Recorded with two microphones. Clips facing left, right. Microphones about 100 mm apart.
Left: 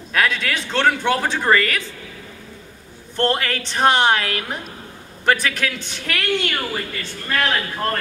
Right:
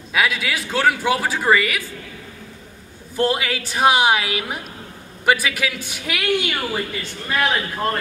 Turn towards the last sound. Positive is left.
turn(degrees=-15)  # may be behind; listen again after turning